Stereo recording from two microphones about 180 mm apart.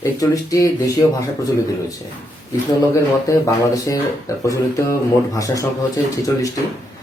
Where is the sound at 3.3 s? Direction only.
20° left (ahead or behind).